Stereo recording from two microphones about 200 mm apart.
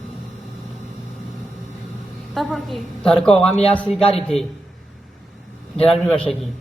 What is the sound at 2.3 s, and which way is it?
A woman's voice, centre (ahead or behind).